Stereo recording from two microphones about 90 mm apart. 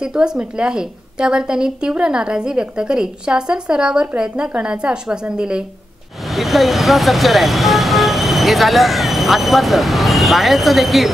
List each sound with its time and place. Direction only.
0.0 s a woman's voice: 10° right (ahead or behind)